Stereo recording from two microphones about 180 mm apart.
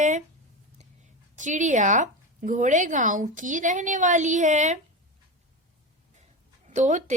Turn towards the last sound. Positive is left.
turn(degrees=-40)  # may be behind; listen again after turning